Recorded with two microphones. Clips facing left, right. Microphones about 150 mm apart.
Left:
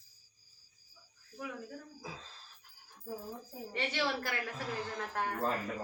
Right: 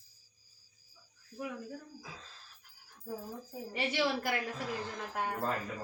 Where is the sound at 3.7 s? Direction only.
15° right (ahead or behind).